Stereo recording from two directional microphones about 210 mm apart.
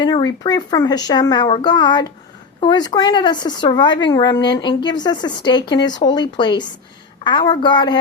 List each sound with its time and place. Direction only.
0.0 s speech: 20° left (ahead or behind)